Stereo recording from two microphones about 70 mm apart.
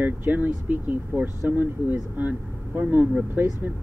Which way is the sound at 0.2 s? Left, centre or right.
Right.